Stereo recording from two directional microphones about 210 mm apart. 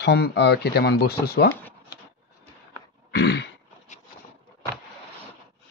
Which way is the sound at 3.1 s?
55° left (ahead or behind).